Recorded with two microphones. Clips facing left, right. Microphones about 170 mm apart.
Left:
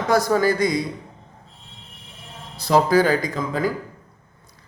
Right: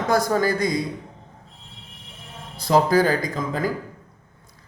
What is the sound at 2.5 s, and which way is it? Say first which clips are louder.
Speech: left 1 dB; 50° right (ahead or behind).